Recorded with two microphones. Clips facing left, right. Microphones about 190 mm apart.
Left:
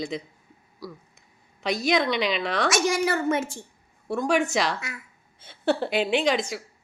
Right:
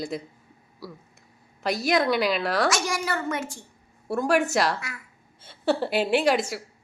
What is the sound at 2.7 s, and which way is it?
Speech, 25° left (ahead or behind).